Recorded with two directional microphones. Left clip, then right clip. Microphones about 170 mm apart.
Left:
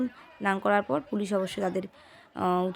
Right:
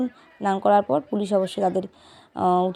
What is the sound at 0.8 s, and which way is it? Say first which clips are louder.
Speech: right 7 dB; 40° left (ahead or behind).